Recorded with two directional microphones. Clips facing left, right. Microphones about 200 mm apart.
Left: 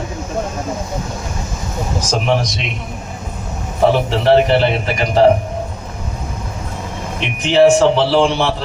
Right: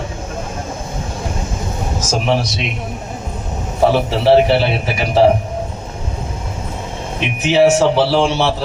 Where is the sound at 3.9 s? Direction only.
10° right (ahead or behind).